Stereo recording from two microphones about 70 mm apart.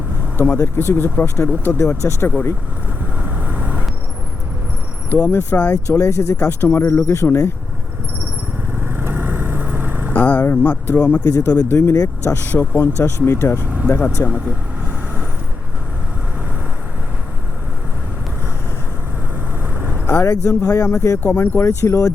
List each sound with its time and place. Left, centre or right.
0.3 s speech: left
3.2 s vehicle: right
5.0 s speech: left
8.7 s vehicle: right
10.2 s speech: left
12.4 s speech: left
20.2 s speech: left